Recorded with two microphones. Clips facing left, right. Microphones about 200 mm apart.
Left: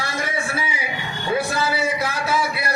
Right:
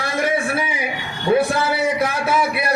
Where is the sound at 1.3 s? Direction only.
60° right (ahead or behind).